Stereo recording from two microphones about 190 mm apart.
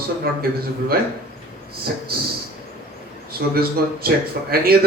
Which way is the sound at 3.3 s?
55° right (ahead or behind).